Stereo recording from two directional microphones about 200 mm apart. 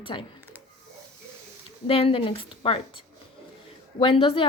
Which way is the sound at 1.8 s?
25° left (ahead or behind).